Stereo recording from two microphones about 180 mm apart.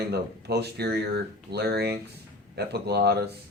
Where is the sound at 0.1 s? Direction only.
65° right (ahead or behind).